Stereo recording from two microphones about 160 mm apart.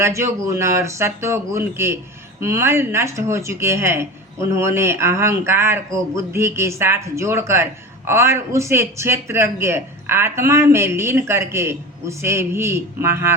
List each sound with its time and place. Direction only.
0.0 s speech: 15° right (ahead or behind)